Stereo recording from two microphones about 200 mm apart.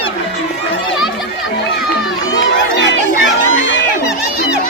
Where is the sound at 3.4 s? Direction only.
80° left.